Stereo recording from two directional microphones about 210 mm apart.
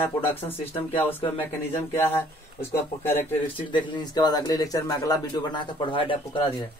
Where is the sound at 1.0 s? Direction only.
10° left (ahead or behind).